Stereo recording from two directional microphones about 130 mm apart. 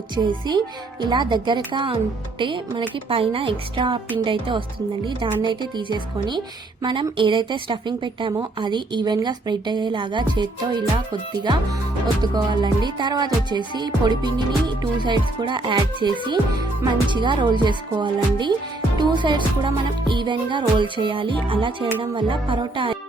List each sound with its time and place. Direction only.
0.2 s music: 35° right (ahead or behind)